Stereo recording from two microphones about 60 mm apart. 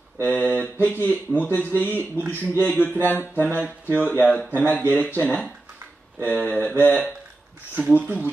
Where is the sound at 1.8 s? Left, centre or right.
Left.